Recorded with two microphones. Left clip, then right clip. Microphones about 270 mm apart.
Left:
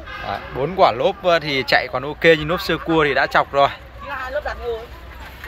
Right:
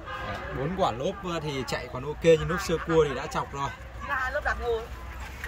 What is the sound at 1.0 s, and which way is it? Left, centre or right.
Speech, left.